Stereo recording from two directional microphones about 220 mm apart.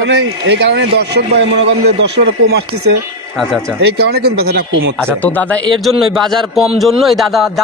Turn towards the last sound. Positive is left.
turn(degrees=0)  # may be behind; listen again after turning